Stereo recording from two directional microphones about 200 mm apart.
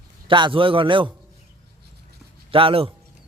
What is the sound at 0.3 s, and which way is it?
Speech, 25° right (ahead or behind).